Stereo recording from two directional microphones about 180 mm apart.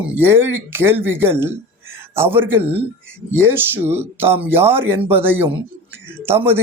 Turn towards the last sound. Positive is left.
turn(degrees=-15)  # may be behind; listen again after turning